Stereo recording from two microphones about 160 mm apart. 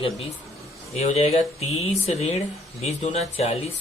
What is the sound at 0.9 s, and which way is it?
Speech, 40° left (ahead or behind).